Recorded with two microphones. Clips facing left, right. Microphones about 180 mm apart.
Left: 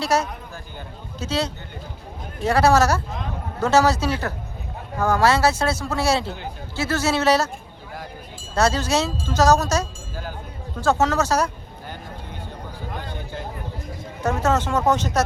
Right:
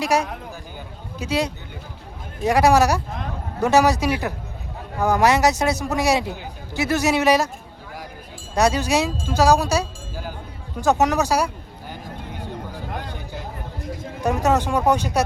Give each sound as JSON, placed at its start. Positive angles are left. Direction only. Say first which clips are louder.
{"t": 0.0, "sound": "a man's voice", "louder": "right 1 dB", "side_deg": -15}
{"t": 8.5, "sound": "a man's voice", "louder": "right 1 dB", "side_deg": -15}
{"t": 14.2, "sound": "a man's voice", "louder": "right 1 dB", "side_deg": -15}